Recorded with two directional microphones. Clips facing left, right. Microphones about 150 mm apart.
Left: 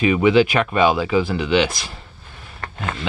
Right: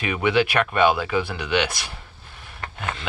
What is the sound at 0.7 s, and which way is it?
Speech, 5° left (ahead or behind).